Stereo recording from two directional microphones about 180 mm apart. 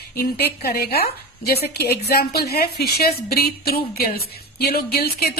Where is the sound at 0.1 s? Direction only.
60° left (ahead or behind).